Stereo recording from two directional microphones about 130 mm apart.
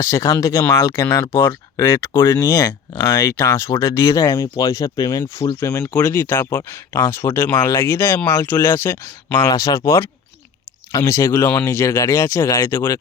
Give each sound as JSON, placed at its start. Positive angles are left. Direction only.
{"t": 0.0, "sound": "speech", "side_deg": 20}